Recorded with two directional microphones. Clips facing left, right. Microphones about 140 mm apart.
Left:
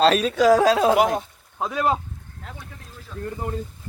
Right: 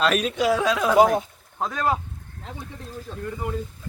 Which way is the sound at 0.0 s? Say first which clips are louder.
Left 5 dB; 30° left (ahead or behind).